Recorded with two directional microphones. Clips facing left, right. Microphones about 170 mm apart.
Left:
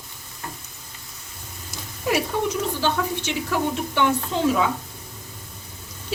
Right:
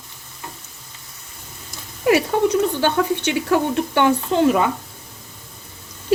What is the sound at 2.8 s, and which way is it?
A woman's voice, 65° right (ahead or behind).